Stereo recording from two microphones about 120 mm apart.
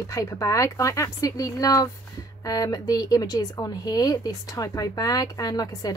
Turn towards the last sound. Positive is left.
turn(degrees=30)  # may be behind; listen again after turning